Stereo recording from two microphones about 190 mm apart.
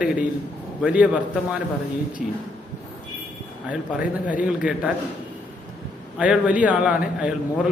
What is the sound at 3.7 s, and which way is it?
A man's voice, 5° right (ahead or behind).